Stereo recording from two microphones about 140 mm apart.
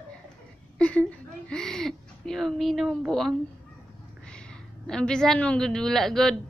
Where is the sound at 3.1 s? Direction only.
Centre (ahead or behind).